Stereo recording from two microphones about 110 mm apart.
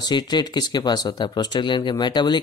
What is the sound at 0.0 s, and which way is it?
Speech, 40° left (ahead or behind).